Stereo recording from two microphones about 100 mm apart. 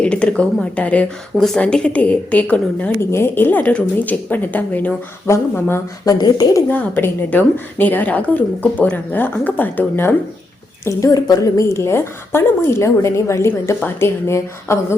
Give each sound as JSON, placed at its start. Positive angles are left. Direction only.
{"t": 0.0, "sound": "a woman's voice", "side_deg": 10}
{"t": 3.0, "sound": "a woman's voice", "side_deg": 25}
{"t": 6.1, "sound": "a woman's voice", "side_deg": 40}
{"t": 6.7, "sound": "a woman's voice", "side_deg": 15}
{"t": 10.8, "sound": "a woman's voice", "side_deg": 35}